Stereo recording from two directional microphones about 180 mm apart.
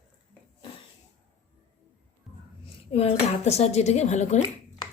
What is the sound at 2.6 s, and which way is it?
Speech, 35° left (ahead or behind).